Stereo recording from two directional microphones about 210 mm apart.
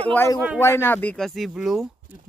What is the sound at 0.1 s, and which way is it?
Speech, 10° left (ahead or behind).